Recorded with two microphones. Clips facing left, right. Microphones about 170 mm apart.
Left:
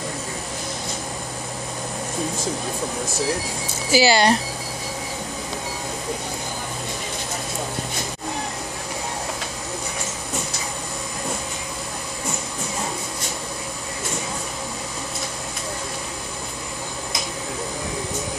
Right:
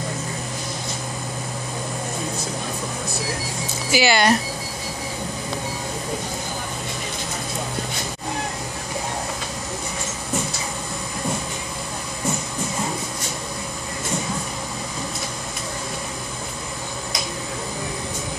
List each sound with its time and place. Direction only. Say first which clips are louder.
3.9 s speech: left 1 dB; 35° left (ahead or behind)